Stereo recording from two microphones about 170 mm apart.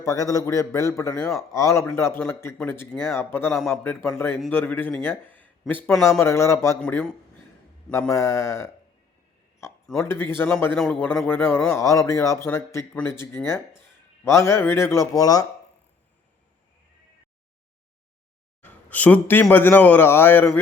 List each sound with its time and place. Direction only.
0.0 s a man's voice: 20° left (ahead or behind)
6.1 s a man's voice: 15° left (ahead or behind)
6.8 s a man's voice: 5° left (ahead or behind)
10.0 s a man's voice: 15° left (ahead or behind)
14.3 s a man's voice: 15° left (ahead or behind)
18.6 s a man's voice: 10° left (ahead or behind)